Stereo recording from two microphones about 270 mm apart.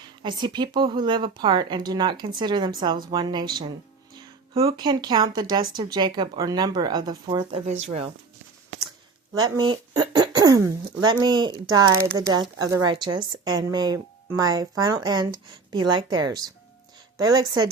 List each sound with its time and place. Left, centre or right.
0.2 s speech: centre
9.3 s speech: centre